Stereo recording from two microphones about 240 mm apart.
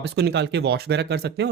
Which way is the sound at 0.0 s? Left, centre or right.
Right.